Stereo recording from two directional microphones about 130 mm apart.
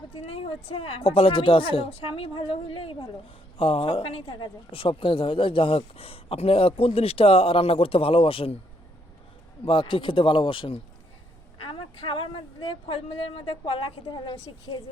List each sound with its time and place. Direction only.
0.2 s speech: 50° left (ahead or behind)
9.6 s speech: 40° left (ahead or behind)